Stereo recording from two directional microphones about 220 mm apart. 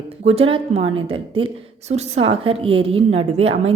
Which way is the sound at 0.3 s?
25° right (ahead or behind).